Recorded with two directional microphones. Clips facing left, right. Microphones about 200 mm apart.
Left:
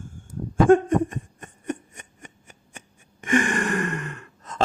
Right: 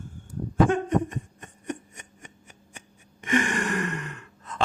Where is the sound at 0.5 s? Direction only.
50° left (ahead or behind).